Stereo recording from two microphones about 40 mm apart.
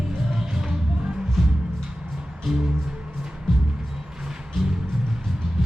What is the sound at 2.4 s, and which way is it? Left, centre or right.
Music, centre.